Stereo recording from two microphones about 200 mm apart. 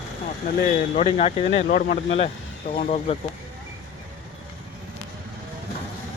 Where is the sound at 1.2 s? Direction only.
30° left (ahead or behind).